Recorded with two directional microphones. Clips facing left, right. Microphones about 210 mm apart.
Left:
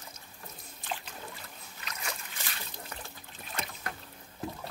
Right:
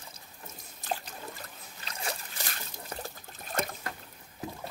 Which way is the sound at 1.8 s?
30° right (ahead or behind).